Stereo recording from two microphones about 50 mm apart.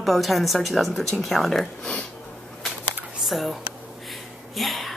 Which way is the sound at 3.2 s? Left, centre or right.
Centre.